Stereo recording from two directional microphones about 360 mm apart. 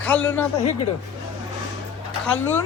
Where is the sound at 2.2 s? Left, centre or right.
Centre.